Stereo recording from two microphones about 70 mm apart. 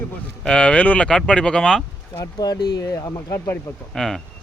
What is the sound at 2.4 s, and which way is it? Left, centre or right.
Speech, left.